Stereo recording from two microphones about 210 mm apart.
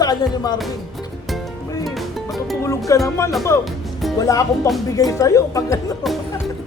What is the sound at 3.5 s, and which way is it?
Speech, 15° left (ahead or behind).